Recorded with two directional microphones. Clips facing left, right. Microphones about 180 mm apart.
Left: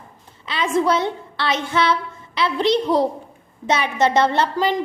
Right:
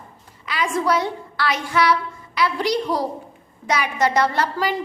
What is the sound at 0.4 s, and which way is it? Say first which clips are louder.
A woman's voice: left 2 dB; 25° left (ahead or behind).